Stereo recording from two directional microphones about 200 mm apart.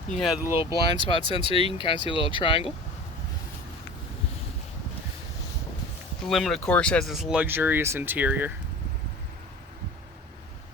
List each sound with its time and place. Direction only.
0.1 s speech: centre (ahead or behind)
0.5 s speech: 25° left (ahead or behind)
6.2 s speech: centre (ahead or behind)